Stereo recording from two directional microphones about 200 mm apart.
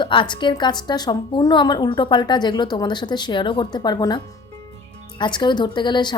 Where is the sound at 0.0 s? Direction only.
25° left (ahead or behind).